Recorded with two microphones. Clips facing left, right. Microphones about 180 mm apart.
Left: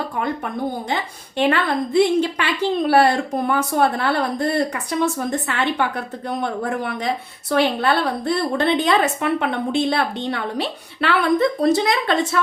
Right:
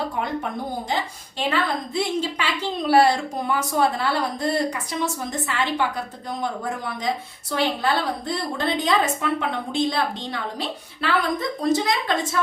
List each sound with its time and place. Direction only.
1.4 s a woman's voice: 60° left (ahead or behind)